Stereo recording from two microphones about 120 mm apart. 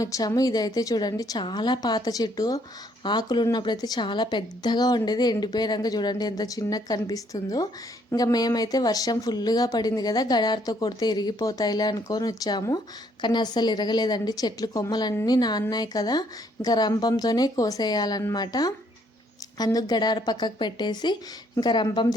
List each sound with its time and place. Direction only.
0.0 s a woman's voice: 30° left (ahead or behind)